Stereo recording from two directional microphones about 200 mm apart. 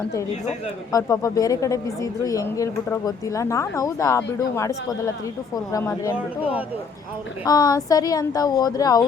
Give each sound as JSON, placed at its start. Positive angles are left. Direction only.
{"t": 0.9, "sound": "speech", "side_deg": 15}
{"t": 7.4, "sound": "speech", "side_deg": 20}